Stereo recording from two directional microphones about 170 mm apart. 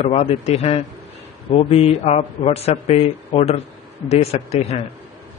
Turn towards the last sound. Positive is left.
turn(degrees=40)  # may be behind; listen again after turning